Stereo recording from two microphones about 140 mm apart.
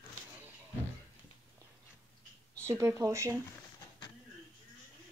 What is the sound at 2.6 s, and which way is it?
Speech, 20° right (ahead or behind).